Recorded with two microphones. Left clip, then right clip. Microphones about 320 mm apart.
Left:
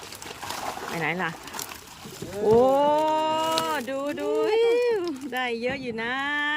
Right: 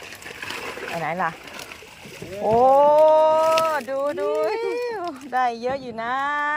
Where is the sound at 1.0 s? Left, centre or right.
Centre.